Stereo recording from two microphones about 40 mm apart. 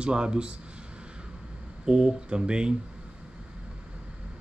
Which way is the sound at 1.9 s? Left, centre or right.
Right.